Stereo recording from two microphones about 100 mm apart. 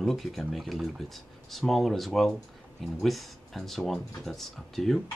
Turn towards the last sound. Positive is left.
turn(degrees=5)  # may be behind; listen again after turning